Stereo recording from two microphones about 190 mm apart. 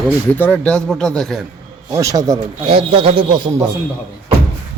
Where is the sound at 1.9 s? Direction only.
15° right (ahead or behind).